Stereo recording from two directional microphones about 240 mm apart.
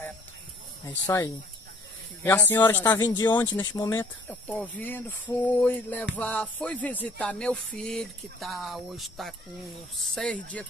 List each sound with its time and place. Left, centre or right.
0.8 s speech: centre
6.1 s music: centre